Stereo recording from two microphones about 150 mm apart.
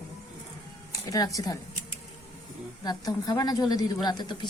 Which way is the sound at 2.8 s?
25° left (ahead or behind).